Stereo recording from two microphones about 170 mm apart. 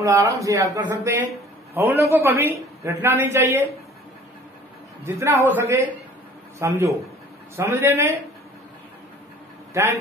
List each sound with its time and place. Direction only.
0.0 s a man's voice: 20° right (ahead or behind)
5.0 s a man's voice: 15° right (ahead or behind)